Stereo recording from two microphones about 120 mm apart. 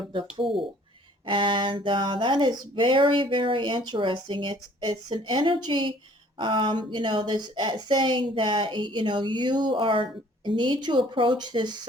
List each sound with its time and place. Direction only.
0.1 s a woman's voice: 45° right (ahead or behind)